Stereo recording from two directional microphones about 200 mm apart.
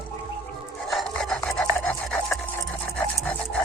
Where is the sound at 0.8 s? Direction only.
Centre (ahead or behind).